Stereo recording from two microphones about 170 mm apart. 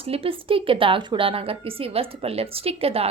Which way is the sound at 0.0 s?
35° right (ahead or behind).